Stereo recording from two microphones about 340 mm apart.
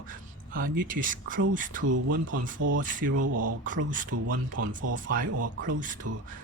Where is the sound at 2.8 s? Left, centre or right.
Right.